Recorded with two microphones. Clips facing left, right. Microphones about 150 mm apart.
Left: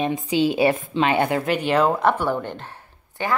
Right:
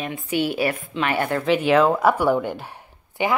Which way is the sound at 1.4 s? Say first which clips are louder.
Right 2 dB; centre (ahead or behind).